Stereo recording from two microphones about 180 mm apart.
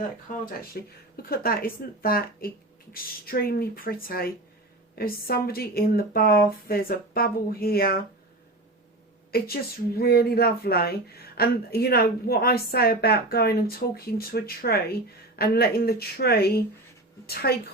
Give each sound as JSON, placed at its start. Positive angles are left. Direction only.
{"t": 0.7, "sound": "a woman's voice", "side_deg": 55}
{"t": 9.3, "sound": "a woman's voice", "side_deg": 55}